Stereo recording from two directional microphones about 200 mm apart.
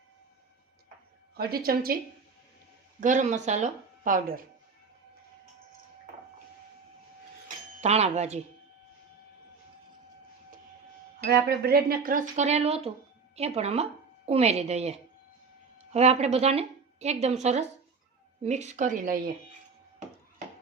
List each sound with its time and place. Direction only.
1.4 s speech: 50° right (ahead or behind)
3.0 s a woman's voice: 40° right (ahead or behind)
7.8 s a woman's voice: 30° right (ahead or behind)
11.3 s a woman's voice: 50° right (ahead or behind)